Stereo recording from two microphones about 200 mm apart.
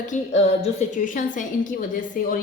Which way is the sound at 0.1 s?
35° left (ahead or behind).